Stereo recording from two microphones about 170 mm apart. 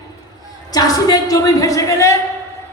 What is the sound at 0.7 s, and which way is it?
A woman's voice, 20° left (ahead or behind).